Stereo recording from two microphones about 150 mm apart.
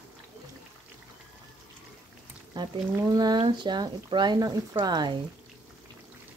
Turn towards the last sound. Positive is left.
turn(degrees=-30)  # may be behind; listen again after turning